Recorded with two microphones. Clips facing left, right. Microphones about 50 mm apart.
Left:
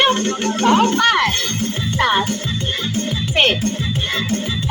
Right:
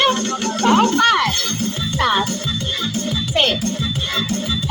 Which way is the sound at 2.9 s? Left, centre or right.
Left.